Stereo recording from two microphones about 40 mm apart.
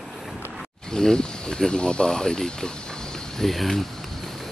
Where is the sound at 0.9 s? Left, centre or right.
Centre.